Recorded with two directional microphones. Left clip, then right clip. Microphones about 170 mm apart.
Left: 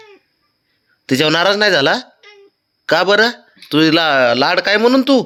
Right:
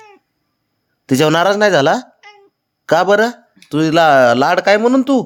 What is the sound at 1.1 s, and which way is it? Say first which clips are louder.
Speech: right 1 dB; 35° right (ahead or behind).